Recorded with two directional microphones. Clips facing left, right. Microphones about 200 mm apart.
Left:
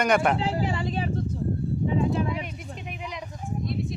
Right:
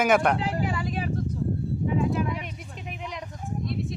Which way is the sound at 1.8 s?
30° left (ahead or behind).